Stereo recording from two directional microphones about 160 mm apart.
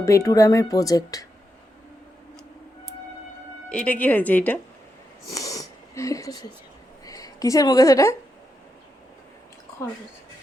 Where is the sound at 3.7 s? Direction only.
10° left (ahead or behind).